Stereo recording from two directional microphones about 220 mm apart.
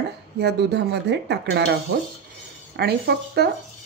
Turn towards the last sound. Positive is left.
turn(degrees=-45)  # may be behind; listen again after turning